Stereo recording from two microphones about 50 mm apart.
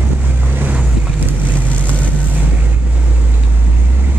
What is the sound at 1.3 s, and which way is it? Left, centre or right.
Vehicle, right.